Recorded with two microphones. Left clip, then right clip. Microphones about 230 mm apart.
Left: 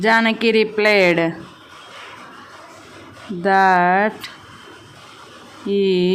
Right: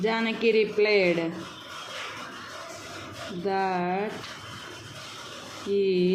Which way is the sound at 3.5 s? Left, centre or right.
Left.